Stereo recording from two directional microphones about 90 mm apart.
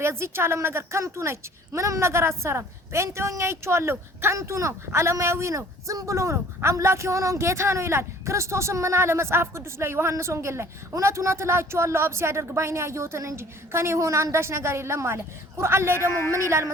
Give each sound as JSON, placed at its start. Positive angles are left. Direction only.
{"t": 0.0, "sound": "a woman's voice", "side_deg": -30}